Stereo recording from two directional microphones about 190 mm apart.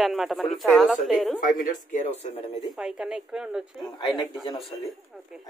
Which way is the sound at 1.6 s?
45° left (ahead or behind).